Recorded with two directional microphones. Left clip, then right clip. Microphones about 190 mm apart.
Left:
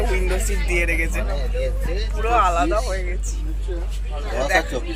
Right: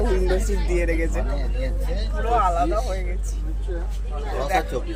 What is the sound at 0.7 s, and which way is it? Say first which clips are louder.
Speech: left 3 dB; 25° right (ahead or behind).